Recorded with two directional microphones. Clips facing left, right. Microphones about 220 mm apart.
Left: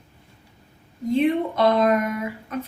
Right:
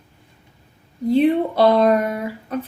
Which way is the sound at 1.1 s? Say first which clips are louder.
Right 4 dB; 35° right (ahead or behind).